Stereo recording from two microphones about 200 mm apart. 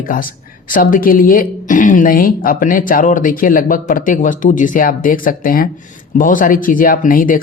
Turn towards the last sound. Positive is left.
turn(degrees=45)  # may be behind; listen again after turning